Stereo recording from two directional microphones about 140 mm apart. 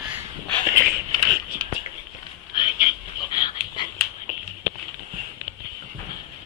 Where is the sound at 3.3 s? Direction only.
35° left (ahead or behind).